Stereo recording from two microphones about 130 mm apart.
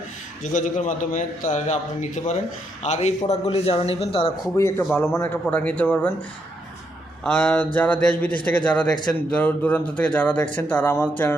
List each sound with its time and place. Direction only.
0.5 s a man's voice: 80° left; by 4.4 s 45° left (ahead or behind)
4.5 s a man's voice: 25° left (ahead or behind)
7.3 s a man's voice: 15° left (ahead or behind)